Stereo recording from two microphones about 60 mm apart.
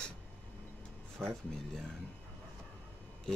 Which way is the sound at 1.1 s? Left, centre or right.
Centre.